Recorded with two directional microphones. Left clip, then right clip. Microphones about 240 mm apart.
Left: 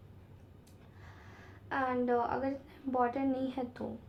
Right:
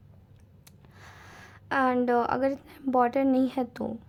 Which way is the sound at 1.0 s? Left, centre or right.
Right.